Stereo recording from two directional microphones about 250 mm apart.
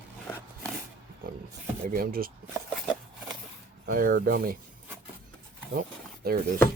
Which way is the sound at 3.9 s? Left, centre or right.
Right.